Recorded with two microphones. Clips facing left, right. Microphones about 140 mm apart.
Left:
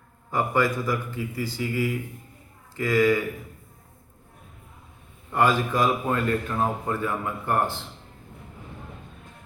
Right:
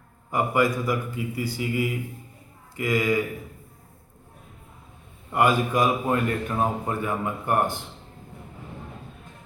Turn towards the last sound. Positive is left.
turn(degrees=-15)  # may be behind; listen again after turning